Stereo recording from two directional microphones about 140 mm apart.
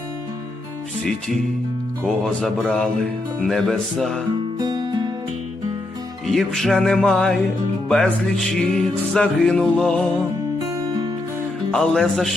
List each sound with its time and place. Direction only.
2.0 s music: centre (ahead or behind)
4.5 s music: 30° right (ahead or behind)
6.2 s music: centre (ahead or behind)
10.7 s music: 25° right (ahead or behind)
11.7 s music: 5° left (ahead or behind)